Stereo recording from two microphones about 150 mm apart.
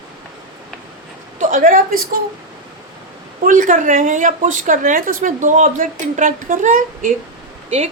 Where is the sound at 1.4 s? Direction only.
60° right (ahead or behind).